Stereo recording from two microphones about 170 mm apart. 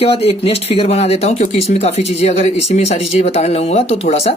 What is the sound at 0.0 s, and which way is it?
Speech, 35° left (ahead or behind).